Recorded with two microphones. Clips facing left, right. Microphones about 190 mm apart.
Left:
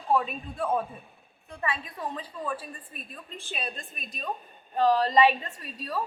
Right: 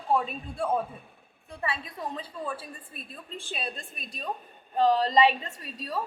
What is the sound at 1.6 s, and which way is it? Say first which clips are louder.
A woman's voice: left 1 dB; 30° right (ahead or behind).